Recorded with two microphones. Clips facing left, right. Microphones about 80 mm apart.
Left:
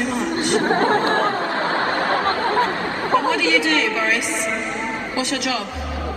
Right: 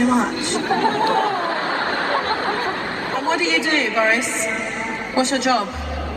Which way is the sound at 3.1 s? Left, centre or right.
Right.